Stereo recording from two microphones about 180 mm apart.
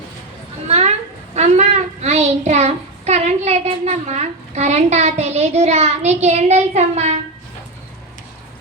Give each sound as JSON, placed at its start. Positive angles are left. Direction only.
{"t": 0.7, "sound": "a child's voice", "side_deg": -35}